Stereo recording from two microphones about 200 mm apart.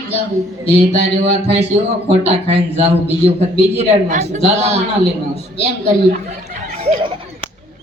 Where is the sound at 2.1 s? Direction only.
30° right (ahead or behind).